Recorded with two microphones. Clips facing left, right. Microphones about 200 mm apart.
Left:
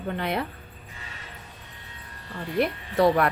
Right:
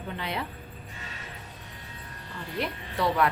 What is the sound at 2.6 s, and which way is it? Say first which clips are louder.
Speech: left 8 dB; 50° left (ahead or behind).